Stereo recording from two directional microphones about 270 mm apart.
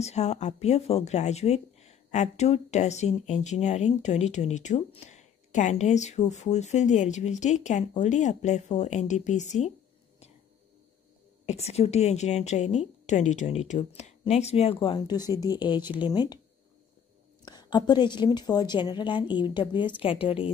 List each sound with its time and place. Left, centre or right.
0.0 s speech: left
11.4 s a woman's voice: left
17.5 s a woman's voice: centre